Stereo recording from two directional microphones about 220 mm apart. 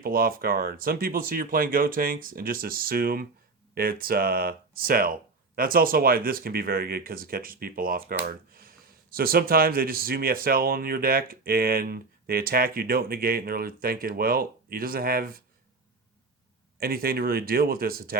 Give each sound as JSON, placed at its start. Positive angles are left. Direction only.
{"t": 0.0, "sound": "speech", "side_deg": -40}
{"t": 16.8, "sound": "speech", "side_deg": -45}